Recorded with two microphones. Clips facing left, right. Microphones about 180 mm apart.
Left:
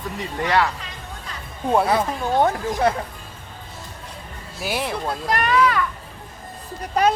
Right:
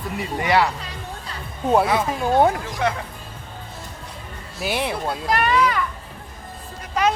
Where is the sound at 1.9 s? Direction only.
10° right (ahead or behind).